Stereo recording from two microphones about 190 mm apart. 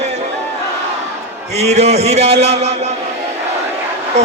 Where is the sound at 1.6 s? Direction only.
35° right (ahead or behind).